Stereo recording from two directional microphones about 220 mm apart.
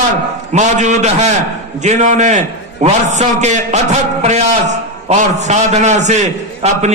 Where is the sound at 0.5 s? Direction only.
30° right (ahead or behind).